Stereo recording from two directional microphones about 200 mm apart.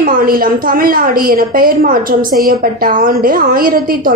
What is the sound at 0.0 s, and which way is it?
A woman's voice, 45° right (ahead or behind).